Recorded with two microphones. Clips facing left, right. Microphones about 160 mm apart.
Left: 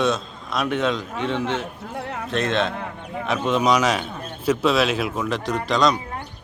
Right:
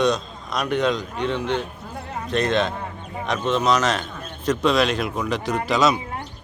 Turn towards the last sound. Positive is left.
turn(degrees=-5)  # may be behind; listen again after turning